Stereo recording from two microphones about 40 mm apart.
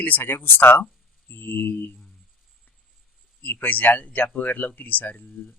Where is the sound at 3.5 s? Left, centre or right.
Left.